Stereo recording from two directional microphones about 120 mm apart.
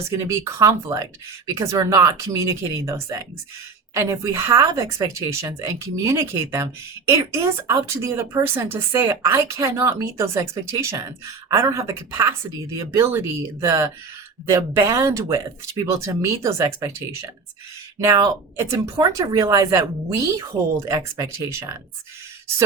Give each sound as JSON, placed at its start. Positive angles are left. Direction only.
{"t": 0.1, "sound": "speech", "side_deg": -25}
{"t": 18.6, "sound": "speech", "side_deg": -25}